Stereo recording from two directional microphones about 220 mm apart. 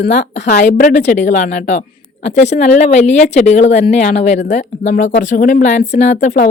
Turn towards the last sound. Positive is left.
turn(degrees=35)  # may be behind; listen again after turning